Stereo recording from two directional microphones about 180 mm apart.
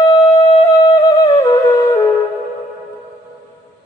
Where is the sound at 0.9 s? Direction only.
25° left (ahead or behind).